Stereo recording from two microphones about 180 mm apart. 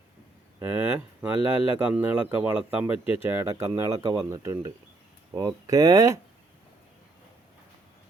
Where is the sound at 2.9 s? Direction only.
30° left (ahead or behind).